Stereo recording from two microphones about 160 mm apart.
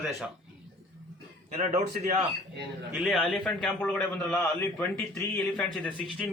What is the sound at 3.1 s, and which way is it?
A man's voice, 5° left (ahead or behind).